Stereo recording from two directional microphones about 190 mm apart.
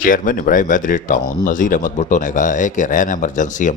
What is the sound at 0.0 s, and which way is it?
Speech, 45° left (ahead or behind).